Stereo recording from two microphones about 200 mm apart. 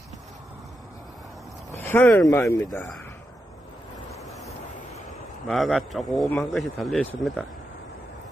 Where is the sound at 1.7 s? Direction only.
10° left (ahead or behind).